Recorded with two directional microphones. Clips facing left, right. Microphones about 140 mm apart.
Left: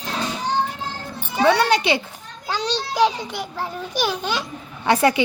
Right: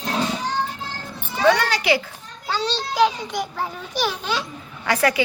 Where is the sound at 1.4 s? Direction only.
20° left (ahead or behind).